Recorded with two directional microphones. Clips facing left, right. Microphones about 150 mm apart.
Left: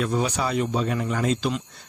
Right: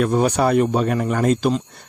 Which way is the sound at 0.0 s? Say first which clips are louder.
Right 7 dB; 55° right (ahead or behind).